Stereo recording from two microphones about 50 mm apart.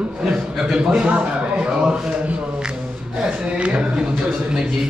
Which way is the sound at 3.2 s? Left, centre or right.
Right.